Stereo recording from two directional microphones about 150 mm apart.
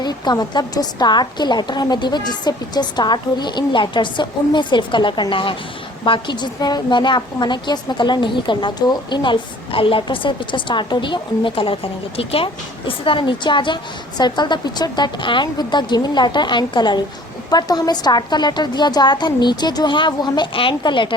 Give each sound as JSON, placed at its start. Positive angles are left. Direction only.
{"t": 0.0, "sound": "a woman's voice", "side_deg": 30}